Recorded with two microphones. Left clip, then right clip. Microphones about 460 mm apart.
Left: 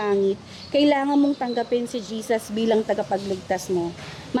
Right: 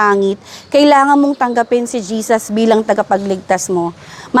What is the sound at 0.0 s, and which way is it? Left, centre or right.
A woman's voice, right.